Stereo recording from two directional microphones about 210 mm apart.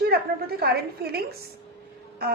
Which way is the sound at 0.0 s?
50° right (ahead or behind).